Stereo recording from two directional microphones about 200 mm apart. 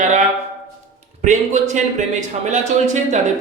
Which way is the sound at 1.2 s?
35° right (ahead or behind).